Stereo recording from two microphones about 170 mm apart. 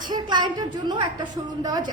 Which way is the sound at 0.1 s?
25° right (ahead or behind).